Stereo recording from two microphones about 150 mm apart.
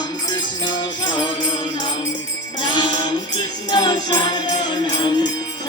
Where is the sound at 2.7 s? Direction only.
30° left (ahead or behind).